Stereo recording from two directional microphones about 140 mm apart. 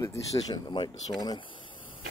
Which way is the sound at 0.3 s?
30° left (ahead or behind).